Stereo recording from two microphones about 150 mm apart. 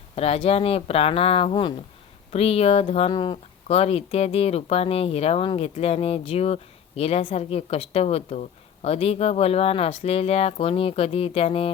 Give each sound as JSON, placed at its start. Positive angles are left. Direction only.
{"t": 0.2, "sound": "speech", "side_deg": 40}